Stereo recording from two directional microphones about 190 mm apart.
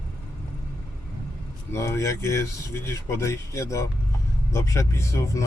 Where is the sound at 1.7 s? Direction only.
15° left (ahead or behind).